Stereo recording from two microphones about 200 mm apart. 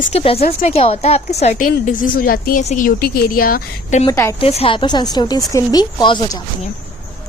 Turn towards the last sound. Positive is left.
turn(degrees=20)  # may be behind; listen again after turning